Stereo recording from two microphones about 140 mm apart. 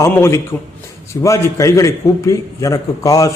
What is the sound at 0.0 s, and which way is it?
A man's voice, 20° left (ahead or behind).